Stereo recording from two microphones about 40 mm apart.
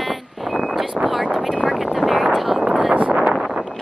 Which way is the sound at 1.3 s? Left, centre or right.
Centre.